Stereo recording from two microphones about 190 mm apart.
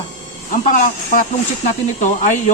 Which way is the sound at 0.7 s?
40° left (ahead or behind).